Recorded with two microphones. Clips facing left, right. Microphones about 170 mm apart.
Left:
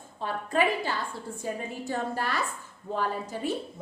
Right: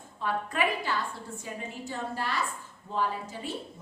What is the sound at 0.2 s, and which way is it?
Speech, 30° left (ahead or behind).